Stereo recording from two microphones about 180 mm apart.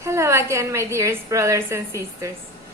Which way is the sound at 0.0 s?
15° right (ahead or behind).